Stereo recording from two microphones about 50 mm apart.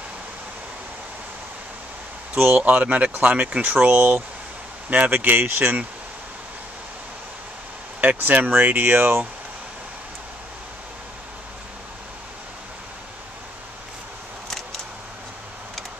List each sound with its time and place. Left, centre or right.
2.3 s speech: right
2.6 s speech: right
3.7 s speech: right
4.8 s speech: right
8.0 s speech: right